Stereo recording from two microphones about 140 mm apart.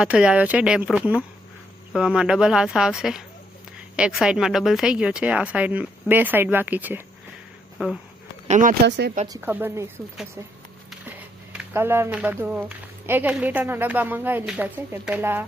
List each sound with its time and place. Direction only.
0.0 s speech: 5° right (ahead or behind)
8.4 s speech: 65° right (ahead or behind)
9.4 s speech: 15° right (ahead or behind)
11.5 s speech: 15° right (ahead or behind)